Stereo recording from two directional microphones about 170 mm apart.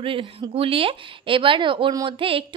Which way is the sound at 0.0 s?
30° right (ahead or behind).